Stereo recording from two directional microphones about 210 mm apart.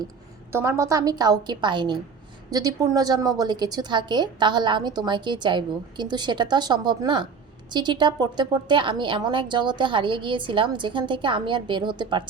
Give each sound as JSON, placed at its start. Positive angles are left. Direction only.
{"t": 0.5, "sound": "a woman's voice", "side_deg": -15}